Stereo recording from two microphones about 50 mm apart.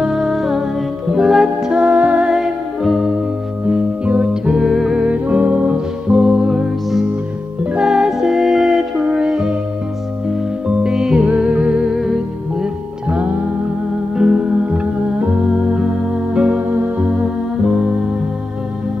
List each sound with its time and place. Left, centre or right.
0.0 s music: centre
1.7 s music: right
2.2 s music: centre
3.6 s music: right
4.3 s music: centre
5.0 s music: right
6.0 s music: centre
10.7 s music: centre
11.9 s music: centre
14.1 s music: centre